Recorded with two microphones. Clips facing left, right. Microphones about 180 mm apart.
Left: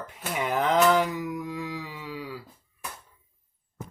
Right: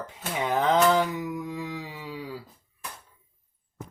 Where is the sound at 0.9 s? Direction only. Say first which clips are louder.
Even; 25° right (ahead or behind).